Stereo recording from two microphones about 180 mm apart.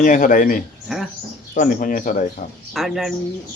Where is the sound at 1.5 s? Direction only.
50° left (ahead or behind).